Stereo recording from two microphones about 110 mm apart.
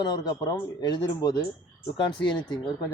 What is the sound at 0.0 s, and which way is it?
Speech, 40° left (ahead or behind).